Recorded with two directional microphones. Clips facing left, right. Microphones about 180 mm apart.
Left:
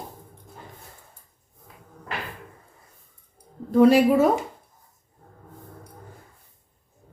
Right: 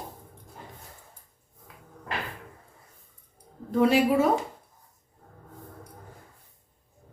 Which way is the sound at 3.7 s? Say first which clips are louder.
Left 7 dB; 45° left (ahead or behind).